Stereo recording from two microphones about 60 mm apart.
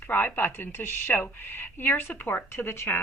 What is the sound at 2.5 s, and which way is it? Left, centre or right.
Speech, left.